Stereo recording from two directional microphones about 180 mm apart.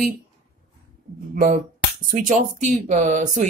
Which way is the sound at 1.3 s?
50° right (ahead or behind).